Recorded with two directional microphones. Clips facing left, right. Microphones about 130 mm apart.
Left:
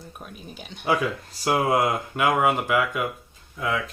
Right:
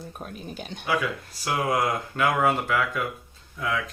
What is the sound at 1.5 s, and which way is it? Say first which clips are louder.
Speech: left 3 dB; 25° left (ahead or behind).